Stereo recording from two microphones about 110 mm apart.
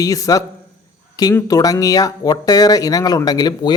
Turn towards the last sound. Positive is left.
turn(degrees=40)  # may be behind; listen again after turning